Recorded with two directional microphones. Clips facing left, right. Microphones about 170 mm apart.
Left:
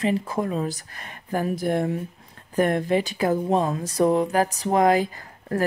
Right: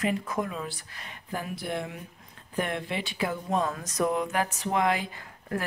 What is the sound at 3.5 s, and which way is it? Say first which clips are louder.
Speech: left 6 dB; 30° left (ahead or behind).